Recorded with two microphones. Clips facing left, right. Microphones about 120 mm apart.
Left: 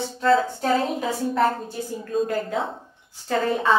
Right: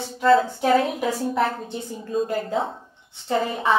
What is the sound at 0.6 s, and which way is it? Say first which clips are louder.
Speech: right 3 dB; 5° right (ahead or behind).